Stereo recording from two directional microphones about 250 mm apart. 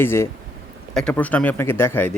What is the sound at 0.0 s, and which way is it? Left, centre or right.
A man's voice, centre.